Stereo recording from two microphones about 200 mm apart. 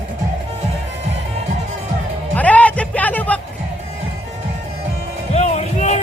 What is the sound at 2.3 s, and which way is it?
Music, 5° left (ahead or behind).